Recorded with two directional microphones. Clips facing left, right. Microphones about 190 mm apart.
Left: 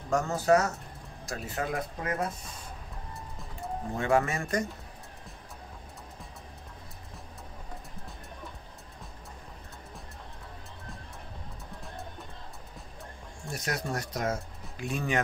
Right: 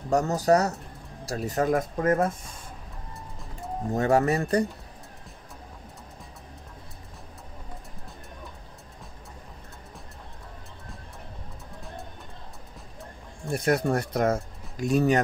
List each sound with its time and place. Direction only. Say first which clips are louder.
0.1 s speech: right 3 dB; 40° right (ahead or behind)
3.9 s speech: right 5 dB; 40° right (ahead or behind)
13.5 s speech: right 10 dB; 55° right (ahead or behind)
14.8 s speech: right 8 dB; 40° right (ahead or behind)